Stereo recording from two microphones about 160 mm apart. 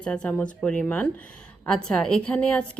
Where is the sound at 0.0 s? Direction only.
5° left (ahead or behind).